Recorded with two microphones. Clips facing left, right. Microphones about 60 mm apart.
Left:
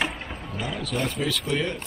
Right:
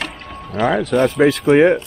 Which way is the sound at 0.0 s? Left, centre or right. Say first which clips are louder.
Right 1 dB; centre.